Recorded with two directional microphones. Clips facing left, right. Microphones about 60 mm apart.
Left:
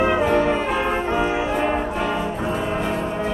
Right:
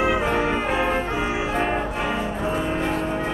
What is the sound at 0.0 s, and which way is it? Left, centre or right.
Music, centre.